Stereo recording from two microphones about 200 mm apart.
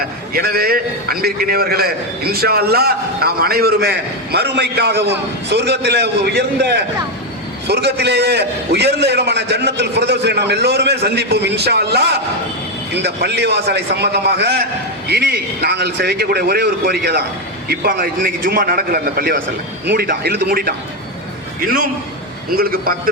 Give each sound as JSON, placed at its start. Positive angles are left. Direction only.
{"t": 0.0, "sound": "a man's voice", "side_deg": -50}